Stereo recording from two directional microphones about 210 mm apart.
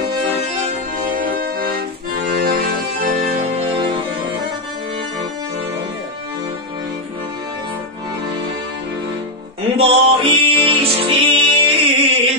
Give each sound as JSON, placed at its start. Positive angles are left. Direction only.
{"t": 0.6, "sound": "music", "side_deg": -40}
{"t": 9.8, "sound": "music", "side_deg": -25}